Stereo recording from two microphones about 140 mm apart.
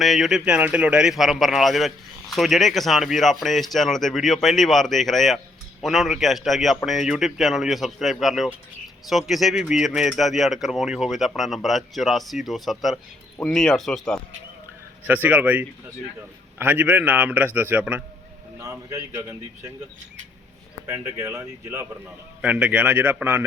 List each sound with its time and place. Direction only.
0.0 s speech: centre (ahead or behind)
15.0 s a man's voice: 15° right (ahead or behind)
18.6 s a man's voice: 20° right (ahead or behind)
20.8 s a man's voice: 15° right (ahead or behind)